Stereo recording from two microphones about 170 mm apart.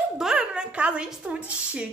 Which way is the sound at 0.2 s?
5° right (ahead or behind).